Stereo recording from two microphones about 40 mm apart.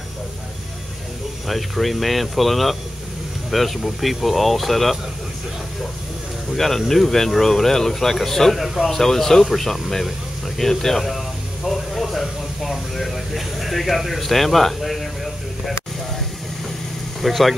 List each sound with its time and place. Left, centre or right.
1.5 s speech: centre
6.5 s speech: centre
17.2 s speech: centre